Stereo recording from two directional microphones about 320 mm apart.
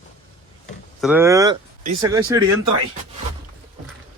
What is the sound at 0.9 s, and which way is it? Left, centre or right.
Speech, centre.